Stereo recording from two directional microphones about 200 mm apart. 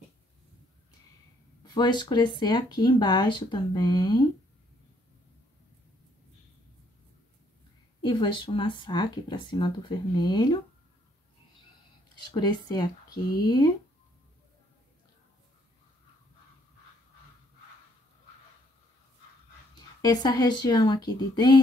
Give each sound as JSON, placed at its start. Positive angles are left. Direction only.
{"t": 1.6, "sound": "speech", "side_deg": 20}
{"t": 8.0, "sound": "speech", "side_deg": 25}
{"t": 12.2, "sound": "speech", "side_deg": 20}
{"t": 20.0, "sound": "speech", "side_deg": 20}